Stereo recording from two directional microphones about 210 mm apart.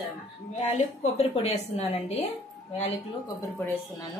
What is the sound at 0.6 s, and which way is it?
A woman's voice, 30° left (ahead or behind).